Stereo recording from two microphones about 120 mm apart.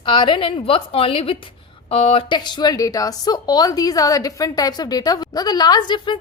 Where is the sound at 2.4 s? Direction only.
35° left (ahead or behind).